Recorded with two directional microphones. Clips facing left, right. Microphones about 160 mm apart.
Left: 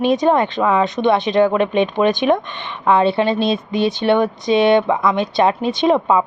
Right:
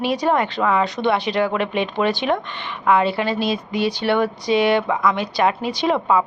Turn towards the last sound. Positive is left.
turn(degrees=20)  # may be behind; listen again after turning